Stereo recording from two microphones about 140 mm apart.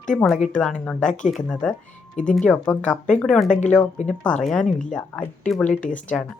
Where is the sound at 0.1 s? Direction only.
5° left (ahead or behind).